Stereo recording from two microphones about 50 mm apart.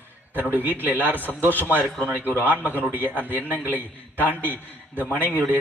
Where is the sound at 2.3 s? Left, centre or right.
Left.